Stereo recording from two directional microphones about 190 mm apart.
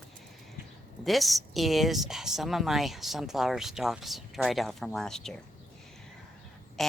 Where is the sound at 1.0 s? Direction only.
Centre (ahead or behind).